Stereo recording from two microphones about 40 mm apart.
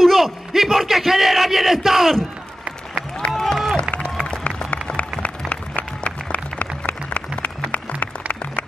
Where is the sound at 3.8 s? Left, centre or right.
Left.